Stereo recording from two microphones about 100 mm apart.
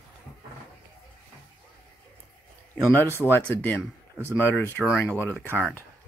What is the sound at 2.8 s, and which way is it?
Speech, 20° left (ahead or behind).